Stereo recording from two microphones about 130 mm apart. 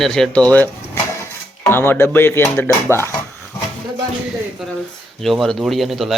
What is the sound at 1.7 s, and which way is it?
Speech, 15° left (ahead or behind).